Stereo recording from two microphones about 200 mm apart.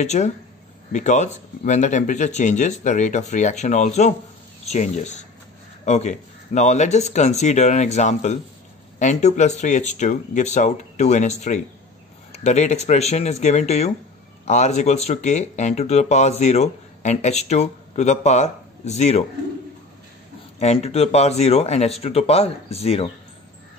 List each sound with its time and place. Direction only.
0.0 s speech: 35° left (ahead or behind)
20.5 s speech: 35° left (ahead or behind)